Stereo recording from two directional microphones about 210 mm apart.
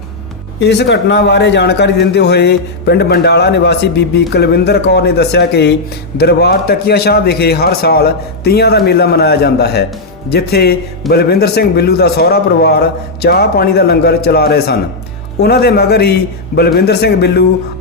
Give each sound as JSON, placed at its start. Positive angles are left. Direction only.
{"t": 0.6, "sound": "a man's voice", "side_deg": 55}